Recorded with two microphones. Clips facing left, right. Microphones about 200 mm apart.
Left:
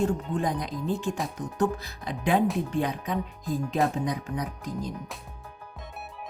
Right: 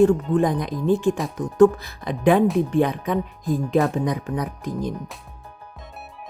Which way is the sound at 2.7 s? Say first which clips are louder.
Right 7 dB; 60° right (ahead or behind).